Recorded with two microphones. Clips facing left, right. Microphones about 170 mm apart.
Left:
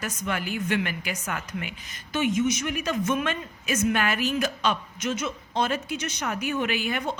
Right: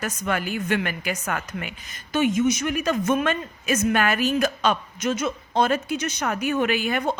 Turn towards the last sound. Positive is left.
turn(degrees=-45)  # may be behind; listen again after turning